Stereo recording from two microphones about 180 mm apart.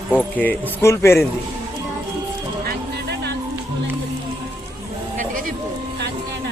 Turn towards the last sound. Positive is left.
turn(degrees=-50)  # may be behind; listen again after turning